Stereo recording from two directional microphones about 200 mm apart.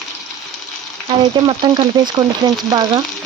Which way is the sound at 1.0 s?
25° right (ahead or behind).